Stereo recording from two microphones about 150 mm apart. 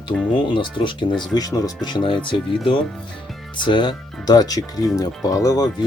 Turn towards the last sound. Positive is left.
turn(degrees=25)  # may be behind; listen again after turning